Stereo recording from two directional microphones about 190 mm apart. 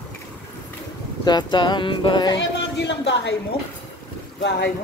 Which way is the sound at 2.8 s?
65° left (ahead or behind).